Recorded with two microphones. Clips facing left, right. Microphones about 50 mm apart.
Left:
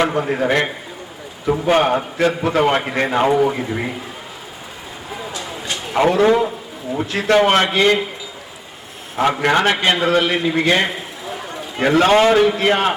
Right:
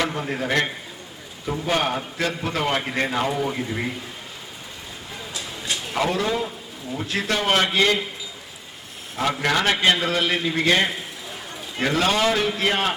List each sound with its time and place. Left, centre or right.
0.0 s a man's voice: left
5.7 s a sound: centre
6.0 s a man's voice: left
9.2 s a man's voice: left
9.7 s a man's voice: centre